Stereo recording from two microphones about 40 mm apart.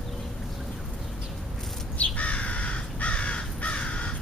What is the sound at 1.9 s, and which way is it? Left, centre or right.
Crow, left.